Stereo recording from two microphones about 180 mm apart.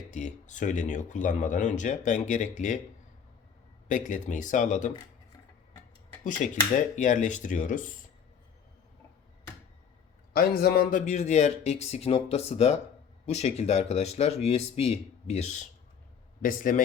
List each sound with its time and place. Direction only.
0.1 s speech: 45° left (ahead or behind)
3.8 s speech: 45° left (ahead or behind)
6.2 s speech: 45° left (ahead or behind)
10.3 s a man's voice: 55° left (ahead or behind); by 15.6 s 40° left (ahead or behind)
16.4 s speech: 50° left (ahead or behind)